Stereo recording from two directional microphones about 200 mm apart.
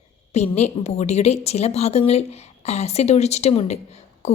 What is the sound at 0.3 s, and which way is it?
A woman's voice, 35° left (ahead or behind).